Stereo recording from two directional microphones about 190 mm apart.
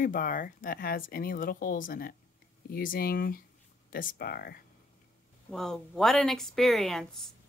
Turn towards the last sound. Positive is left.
turn(degrees=0)  # may be behind; listen again after turning